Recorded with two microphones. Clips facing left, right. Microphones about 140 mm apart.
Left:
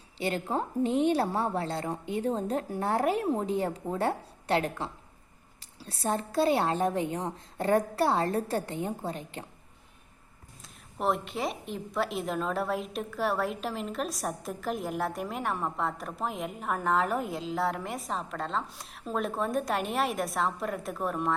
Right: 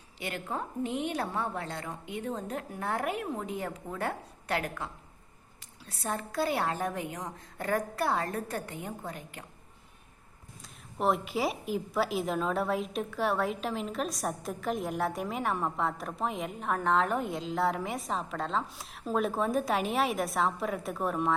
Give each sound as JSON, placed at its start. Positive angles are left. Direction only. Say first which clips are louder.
{"t": 0.2, "sound": "a woman's voice", "louder": "left 6 dB", "side_deg": 30}
{"t": 10.9, "sound": "a woman's voice", "louder": "right 1 dB", "side_deg": 0}